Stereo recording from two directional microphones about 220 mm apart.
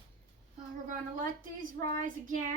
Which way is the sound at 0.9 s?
35° right (ahead or behind).